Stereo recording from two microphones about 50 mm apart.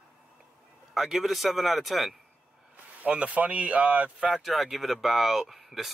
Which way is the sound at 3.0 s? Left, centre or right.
Right.